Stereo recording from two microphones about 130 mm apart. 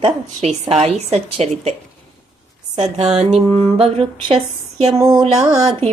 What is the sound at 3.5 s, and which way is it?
Speech, 45° right (ahead or behind).